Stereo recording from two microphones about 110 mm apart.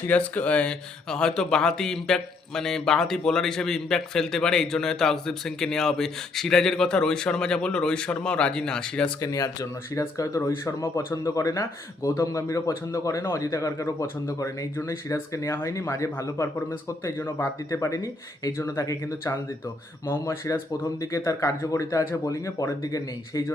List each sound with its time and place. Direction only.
0.1 s speech: 10° left (ahead or behind)
9.2 s a man's voice: 30° left (ahead or behind)